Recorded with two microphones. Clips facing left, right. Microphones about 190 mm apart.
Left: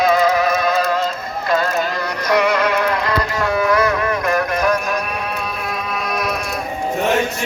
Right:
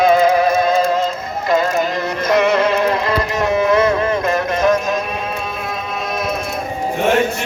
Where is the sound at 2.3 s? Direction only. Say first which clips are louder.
Right 2 dB; 25° right (ahead or behind).